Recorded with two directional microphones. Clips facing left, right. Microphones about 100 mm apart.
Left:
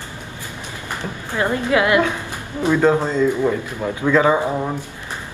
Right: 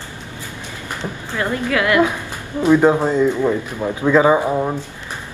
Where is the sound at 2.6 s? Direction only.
15° right (ahead or behind).